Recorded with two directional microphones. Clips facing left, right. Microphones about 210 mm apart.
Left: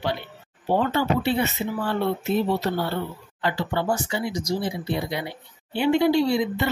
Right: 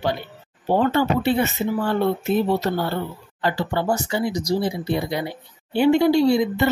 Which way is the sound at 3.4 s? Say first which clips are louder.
Right 2 dB; 40° right (ahead or behind).